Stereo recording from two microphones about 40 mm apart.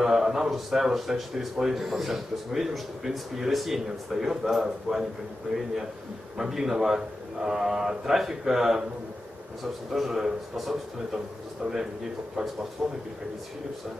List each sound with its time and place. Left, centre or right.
0.0 s speech: centre
6.3 s speech: centre
9.9 s a man's voice: centre
11.6 s speech: centre